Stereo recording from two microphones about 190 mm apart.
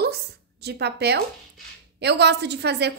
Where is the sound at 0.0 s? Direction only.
60° right (ahead or behind).